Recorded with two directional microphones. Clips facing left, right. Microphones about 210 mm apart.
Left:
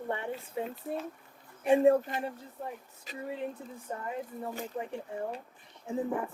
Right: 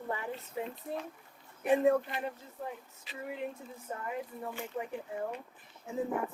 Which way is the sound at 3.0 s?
30° left (ahead or behind).